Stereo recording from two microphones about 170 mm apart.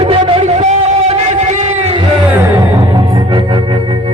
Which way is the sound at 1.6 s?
35° right (ahead or behind).